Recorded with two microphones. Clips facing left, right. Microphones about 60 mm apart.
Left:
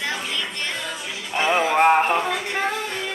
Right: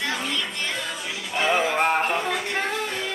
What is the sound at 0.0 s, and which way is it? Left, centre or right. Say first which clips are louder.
Music: even; centre.